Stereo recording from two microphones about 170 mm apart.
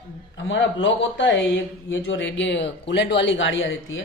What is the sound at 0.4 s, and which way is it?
A man's voice, 90° left.